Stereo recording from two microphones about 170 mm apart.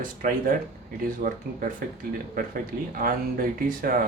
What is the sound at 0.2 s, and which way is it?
Speech, 55° right (ahead or behind).